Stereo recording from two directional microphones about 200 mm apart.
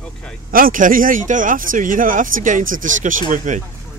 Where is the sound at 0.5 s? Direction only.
45° right (ahead or behind).